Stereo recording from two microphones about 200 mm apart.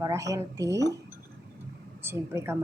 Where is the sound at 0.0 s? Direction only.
15° right (ahead or behind).